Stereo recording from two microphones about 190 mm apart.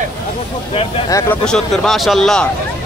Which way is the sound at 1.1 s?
5° left (ahead or behind).